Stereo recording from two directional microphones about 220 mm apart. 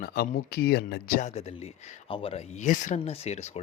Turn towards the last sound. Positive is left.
turn(degrees=30)  # may be behind; listen again after turning